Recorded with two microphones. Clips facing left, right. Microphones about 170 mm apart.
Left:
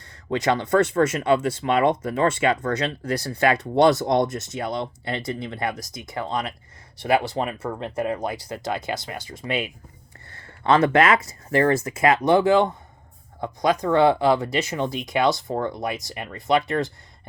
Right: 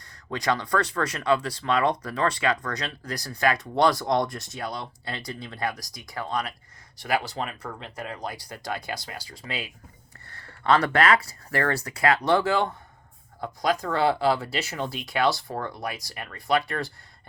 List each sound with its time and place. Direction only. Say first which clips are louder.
0.3 s speech: left 5 dB; 25° left (ahead or behind)
8.1 s speech: left 7 dB; 25° left (ahead or behind)